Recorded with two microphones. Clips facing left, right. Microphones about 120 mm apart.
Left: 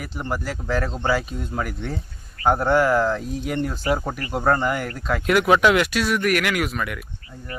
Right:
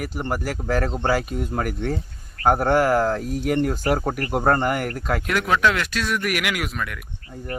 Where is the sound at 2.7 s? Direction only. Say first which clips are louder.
Even; 50° right (ahead or behind).